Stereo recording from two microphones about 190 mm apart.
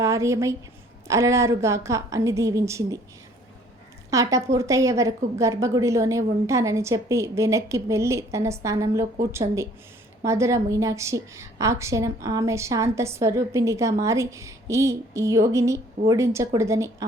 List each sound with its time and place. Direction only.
0.0 s a woman's voice: 15° right (ahead or behind)
4.1 s a woman's voice: 15° right (ahead or behind)